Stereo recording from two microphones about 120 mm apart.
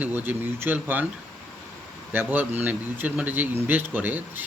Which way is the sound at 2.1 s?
15° right (ahead or behind).